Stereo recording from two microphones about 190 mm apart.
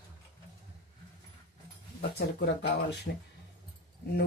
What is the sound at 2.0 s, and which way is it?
A woman's voice, 60° left (ahead or behind).